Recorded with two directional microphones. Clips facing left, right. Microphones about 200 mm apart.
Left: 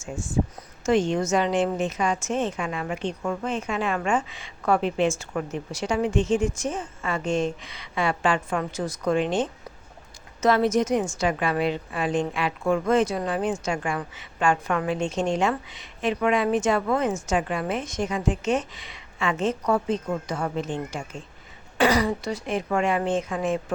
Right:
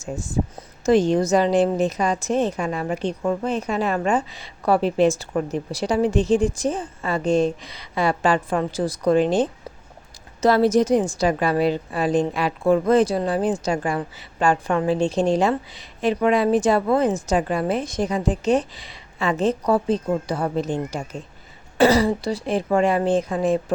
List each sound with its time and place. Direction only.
0.0 s a woman's voice: 40° right (ahead or behind)